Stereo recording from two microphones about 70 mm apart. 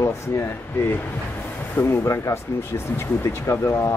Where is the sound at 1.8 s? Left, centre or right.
Left.